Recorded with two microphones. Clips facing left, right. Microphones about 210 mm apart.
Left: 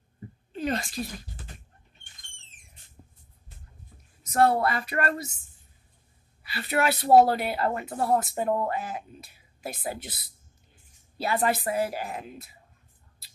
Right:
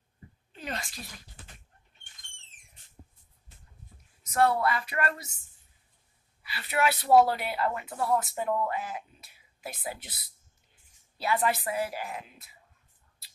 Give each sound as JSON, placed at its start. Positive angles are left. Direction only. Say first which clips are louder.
{"t": 0.5, "sound": "a sound", "louder": "left 9 dB", "side_deg": 40}
{"t": 4.3, "sound": "speech", "louder": "left 3 dB", "side_deg": 40}
{"t": 6.4, "sound": "speech", "louder": "left 2 dB", "side_deg": 45}
{"t": 11.1, "sound": "speech", "louder": "left 2 dB", "side_deg": 40}